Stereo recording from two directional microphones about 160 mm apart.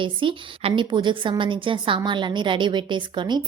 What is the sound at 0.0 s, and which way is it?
A woman's voice, 30° right (ahead or behind).